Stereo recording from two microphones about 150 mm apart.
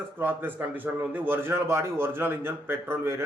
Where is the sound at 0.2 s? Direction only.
15° right (ahead or behind).